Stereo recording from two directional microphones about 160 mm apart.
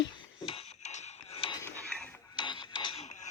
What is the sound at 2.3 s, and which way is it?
Music, 30° left (ahead or behind).